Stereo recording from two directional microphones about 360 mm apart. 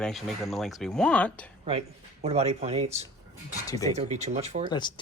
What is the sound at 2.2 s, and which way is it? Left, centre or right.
Speech, centre.